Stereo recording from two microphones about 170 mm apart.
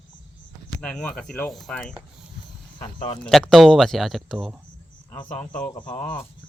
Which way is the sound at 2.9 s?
25° left (ahead or behind).